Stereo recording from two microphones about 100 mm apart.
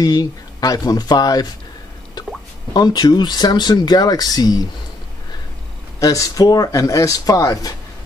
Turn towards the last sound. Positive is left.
turn(degrees=35)  # may be behind; listen again after turning